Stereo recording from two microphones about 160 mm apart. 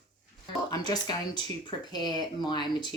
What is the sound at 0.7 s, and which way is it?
Speech, 25° left (ahead or behind).